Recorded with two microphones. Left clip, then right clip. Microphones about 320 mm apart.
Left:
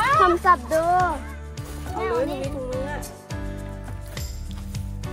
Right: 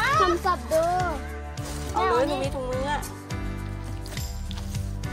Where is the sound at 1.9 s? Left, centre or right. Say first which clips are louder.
Right 2 dB; centre.